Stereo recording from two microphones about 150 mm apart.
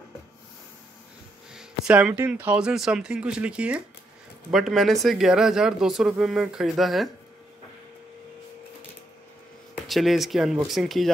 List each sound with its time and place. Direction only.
1.5 s speech: 5° right (ahead or behind)
9.8 s speech: centre (ahead or behind)